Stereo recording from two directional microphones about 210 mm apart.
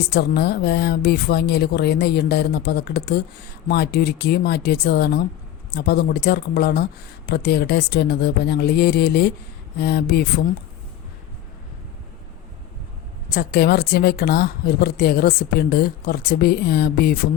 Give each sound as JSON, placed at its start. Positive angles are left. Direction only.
{"t": 0.1, "sound": "a woman's voice", "side_deg": 50}
{"t": 13.3, "sound": "a woman's voice", "side_deg": 45}